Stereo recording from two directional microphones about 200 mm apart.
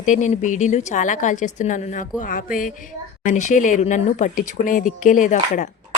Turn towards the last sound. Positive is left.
turn(degrees=40)  # may be behind; listen again after turning